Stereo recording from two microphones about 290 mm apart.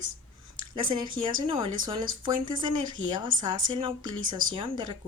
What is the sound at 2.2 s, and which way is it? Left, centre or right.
Speech, centre.